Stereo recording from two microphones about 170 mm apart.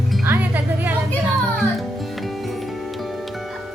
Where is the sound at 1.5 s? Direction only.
Centre (ahead or behind).